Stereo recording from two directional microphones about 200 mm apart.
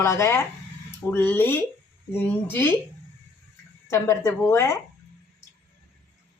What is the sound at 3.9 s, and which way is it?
Speech, 15° left (ahead or behind).